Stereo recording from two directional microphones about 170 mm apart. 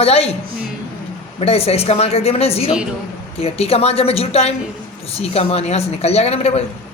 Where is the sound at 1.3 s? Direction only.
35° left (ahead or behind).